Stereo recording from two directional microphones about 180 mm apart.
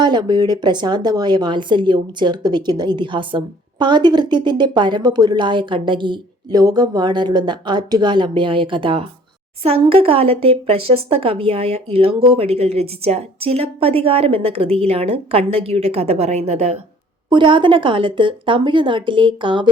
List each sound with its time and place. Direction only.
0.0 s a woman's voice: 25° right (ahead or behind)